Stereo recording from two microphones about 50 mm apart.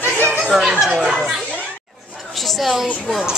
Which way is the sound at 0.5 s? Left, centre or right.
Centre.